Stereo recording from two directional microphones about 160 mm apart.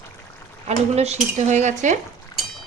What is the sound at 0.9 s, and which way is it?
Cutlery, 45° right (ahead or behind).